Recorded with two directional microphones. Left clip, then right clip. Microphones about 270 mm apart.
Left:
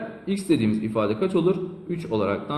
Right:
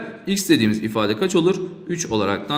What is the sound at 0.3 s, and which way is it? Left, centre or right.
A man's voice, right.